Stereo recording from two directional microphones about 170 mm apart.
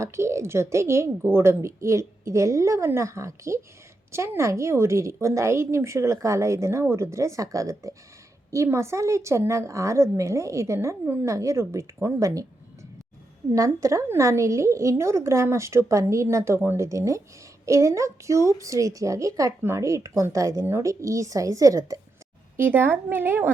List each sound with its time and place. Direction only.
0.0 s a woman's voice: 15° right (ahead or behind)
13.5 s a woman's voice: 15° right (ahead or behind)